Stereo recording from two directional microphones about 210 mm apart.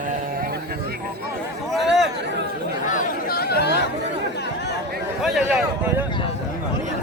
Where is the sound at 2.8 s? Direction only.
40° left (ahead or behind).